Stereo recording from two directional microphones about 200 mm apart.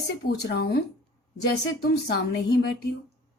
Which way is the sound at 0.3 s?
55° left (ahead or behind).